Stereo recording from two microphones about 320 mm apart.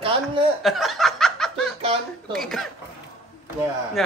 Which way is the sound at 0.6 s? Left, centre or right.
Centre.